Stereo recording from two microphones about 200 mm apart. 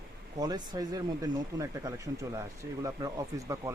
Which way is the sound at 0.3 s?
20° right (ahead or behind).